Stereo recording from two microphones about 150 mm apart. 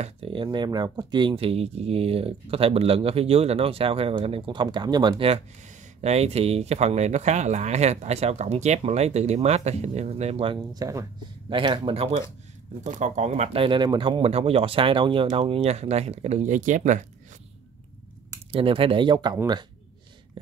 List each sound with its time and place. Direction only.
0.0 s speech: 35° right (ahead or behind)
5.9 s speech: 45° right (ahead or behind)
12.8 s speech: 55° right (ahead or behind)
18.5 s speech: 35° right (ahead or behind)